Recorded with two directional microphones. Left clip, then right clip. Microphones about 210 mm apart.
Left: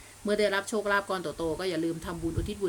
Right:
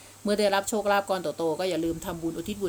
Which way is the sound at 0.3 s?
10° right (ahead or behind).